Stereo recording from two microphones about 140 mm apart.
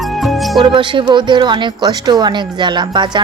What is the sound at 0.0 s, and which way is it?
Music, centre (ahead or behind).